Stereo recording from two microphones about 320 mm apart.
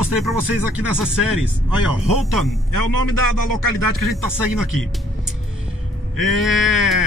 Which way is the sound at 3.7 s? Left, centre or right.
Left.